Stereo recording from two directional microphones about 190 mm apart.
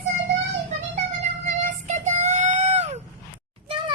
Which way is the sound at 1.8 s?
40° right (ahead or behind).